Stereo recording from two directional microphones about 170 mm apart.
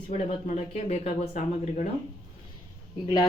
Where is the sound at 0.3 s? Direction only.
40° left (ahead or behind).